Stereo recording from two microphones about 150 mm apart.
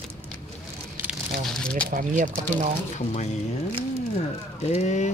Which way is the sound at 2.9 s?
50° left (ahead or behind).